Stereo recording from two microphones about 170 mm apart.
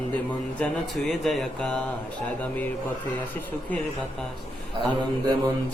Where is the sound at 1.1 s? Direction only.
Centre (ahead or behind).